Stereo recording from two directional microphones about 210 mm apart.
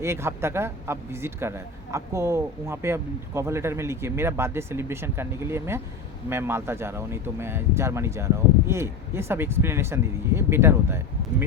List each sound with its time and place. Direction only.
0.0 s a man's voice: 10° right (ahead or behind)